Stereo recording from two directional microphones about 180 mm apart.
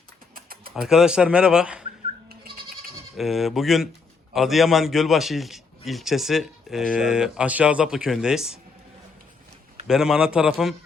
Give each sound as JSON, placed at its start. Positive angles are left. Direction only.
{"t": 0.3, "sound": "typing", "side_deg": -55}
{"t": 0.8, "sound": "a man's voice", "side_deg": -5}
{"t": 3.2, "sound": "a man's voice", "side_deg": 0}
{"t": 9.8, "sound": "a man's voice", "side_deg": -5}